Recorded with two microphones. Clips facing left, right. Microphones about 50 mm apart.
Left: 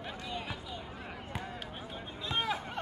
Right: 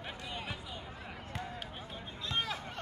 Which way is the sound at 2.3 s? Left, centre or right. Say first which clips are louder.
Left 3 dB; centre.